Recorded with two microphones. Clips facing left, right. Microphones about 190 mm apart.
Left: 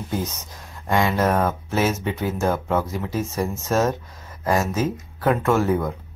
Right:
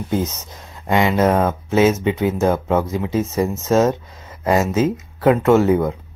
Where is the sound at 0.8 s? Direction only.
20° right (ahead or behind).